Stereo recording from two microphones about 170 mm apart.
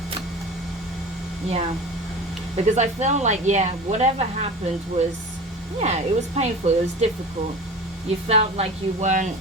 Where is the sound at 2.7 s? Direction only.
45° right (ahead or behind).